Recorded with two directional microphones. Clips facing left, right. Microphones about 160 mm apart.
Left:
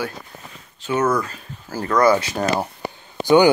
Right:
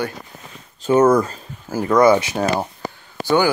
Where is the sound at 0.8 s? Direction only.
45° right (ahead or behind).